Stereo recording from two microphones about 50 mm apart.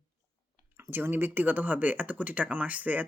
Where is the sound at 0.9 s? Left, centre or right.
Right.